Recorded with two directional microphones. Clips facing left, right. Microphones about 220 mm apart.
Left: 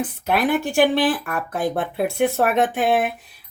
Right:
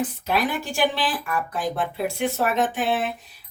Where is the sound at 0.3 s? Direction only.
55° left (ahead or behind).